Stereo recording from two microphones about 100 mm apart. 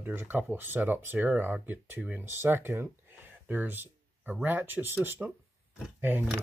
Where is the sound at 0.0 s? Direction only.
20° right (ahead or behind).